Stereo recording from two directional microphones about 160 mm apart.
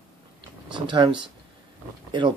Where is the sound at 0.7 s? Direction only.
30° right (ahead or behind).